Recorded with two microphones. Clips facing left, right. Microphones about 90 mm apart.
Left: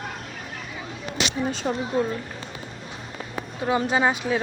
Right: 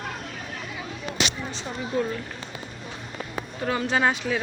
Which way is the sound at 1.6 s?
55° left (ahead or behind).